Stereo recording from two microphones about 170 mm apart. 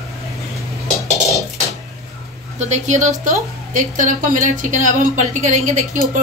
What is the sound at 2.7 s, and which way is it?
A woman's voice, 45° right (ahead or behind).